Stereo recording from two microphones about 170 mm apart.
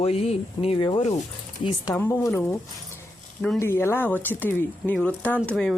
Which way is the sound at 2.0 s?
10° left (ahead or behind).